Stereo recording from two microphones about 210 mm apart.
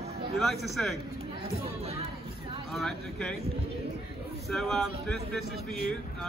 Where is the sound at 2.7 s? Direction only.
Centre (ahead or behind).